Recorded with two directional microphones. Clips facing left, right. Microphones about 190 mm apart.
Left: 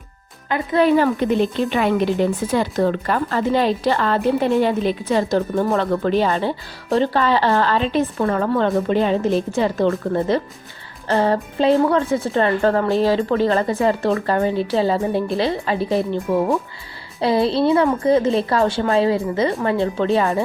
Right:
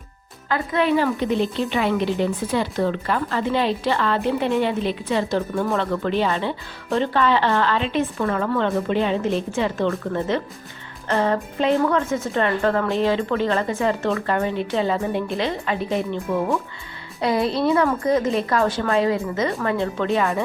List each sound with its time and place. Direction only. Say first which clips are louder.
0.7 s a woman's voice: left 5 dB; 40° left (ahead or behind)